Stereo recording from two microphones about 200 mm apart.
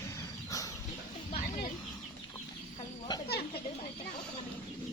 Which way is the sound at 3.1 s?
20° left (ahead or behind).